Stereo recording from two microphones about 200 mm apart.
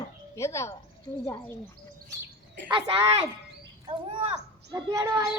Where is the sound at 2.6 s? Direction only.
25° right (ahead or behind).